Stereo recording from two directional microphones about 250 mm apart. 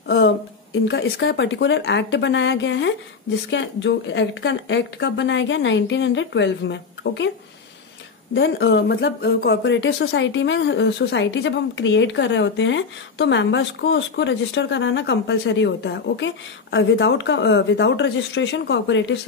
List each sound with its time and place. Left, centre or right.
0.0 s a sound: left
0.8 s speech: left
8.4 s speech: left